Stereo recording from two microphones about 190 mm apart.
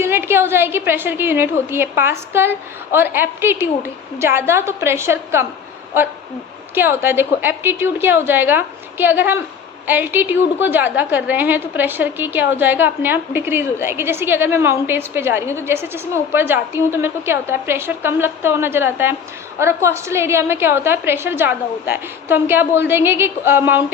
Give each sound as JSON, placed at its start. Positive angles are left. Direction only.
{"t": 0.0, "sound": "a woman's voice", "side_deg": -10}
{"t": 6.7, "sound": "a woman's voice", "side_deg": -10}